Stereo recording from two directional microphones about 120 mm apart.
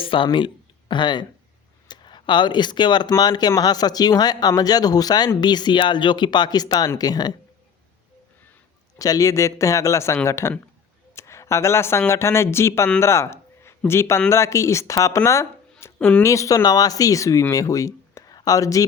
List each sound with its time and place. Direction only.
0.0 s speech: 45° left (ahead or behind)
9.0 s speech: 30° left (ahead or behind)
16.0 s speech: 10° left (ahead or behind)
16.2 s speech: 25° left (ahead or behind)